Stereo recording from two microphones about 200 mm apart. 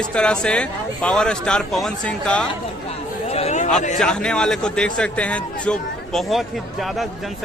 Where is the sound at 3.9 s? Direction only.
5° left (ahead or behind).